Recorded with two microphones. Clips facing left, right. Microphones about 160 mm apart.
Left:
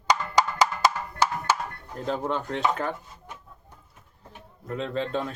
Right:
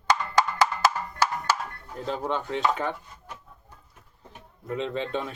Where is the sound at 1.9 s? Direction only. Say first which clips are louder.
Left 1 dB; centre (ahead or behind).